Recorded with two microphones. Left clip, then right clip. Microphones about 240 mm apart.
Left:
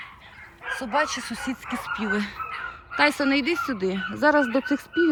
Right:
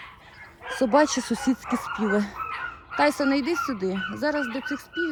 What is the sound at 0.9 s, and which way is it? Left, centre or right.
Speech, right.